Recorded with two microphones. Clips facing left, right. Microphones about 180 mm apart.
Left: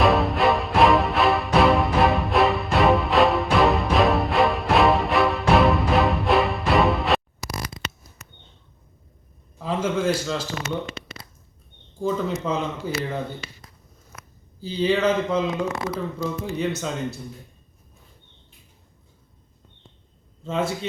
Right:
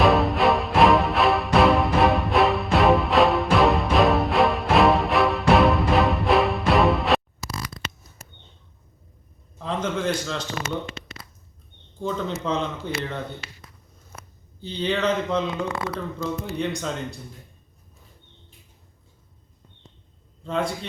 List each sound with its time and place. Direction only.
0.0 s music: centre (ahead or behind)
9.6 s a man's voice: 5° left (ahead or behind)
11.9 s speech: 5° left (ahead or behind)
14.1 s a sound: 30° right (ahead or behind)
14.6 s speech: 5° left (ahead or behind)
20.4 s speech: 5° left (ahead or behind)